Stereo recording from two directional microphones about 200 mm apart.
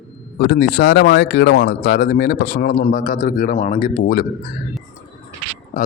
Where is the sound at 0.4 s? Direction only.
55° left (ahead or behind).